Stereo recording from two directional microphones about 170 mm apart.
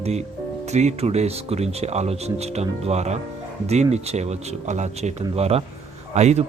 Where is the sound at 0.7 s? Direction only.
40° right (ahead or behind).